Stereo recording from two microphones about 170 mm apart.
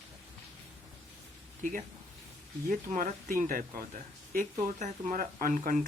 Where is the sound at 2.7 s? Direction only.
50° right (ahead or behind).